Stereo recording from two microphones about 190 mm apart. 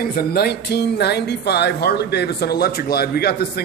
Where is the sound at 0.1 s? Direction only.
55° left (ahead or behind).